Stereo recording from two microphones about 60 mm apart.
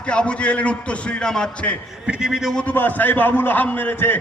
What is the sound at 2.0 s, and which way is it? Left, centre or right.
Speech, centre.